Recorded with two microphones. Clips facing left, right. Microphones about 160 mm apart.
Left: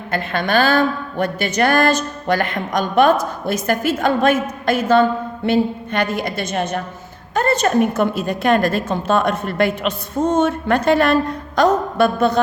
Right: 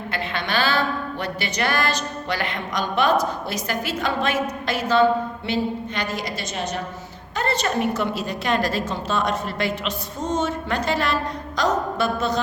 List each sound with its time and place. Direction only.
0.1 s a woman's voice: 50° left (ahead or behind)